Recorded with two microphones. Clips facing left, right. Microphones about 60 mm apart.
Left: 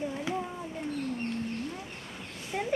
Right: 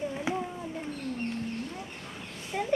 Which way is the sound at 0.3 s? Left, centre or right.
Right.